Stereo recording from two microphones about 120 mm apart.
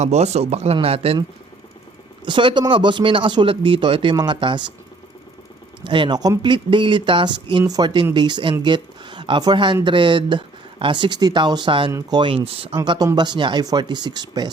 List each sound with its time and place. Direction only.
0.0 s speech: 65° right (ahead or behind)
2.2 s speech: 40° right (ahead or behind)
5.8 s speech: 40° right (ahead or behind)
7.6 s speech: 30° right (ahead or behind); by 12.7 s 50° right (ahead or behind)
12.7 s speech: 40° right (ahead or behind)